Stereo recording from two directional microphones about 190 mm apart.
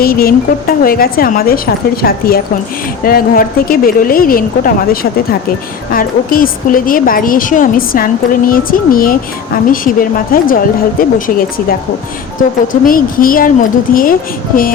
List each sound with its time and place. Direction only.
0.0 s a woman's voice: 50° left (ahead or behind)